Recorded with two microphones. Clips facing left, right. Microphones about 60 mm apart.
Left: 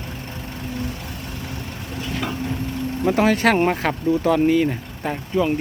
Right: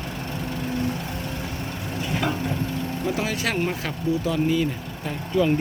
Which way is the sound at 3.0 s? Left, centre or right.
Left.